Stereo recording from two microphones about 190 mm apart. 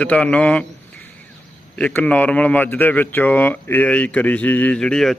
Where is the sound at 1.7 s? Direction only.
10° left (ahead or behind).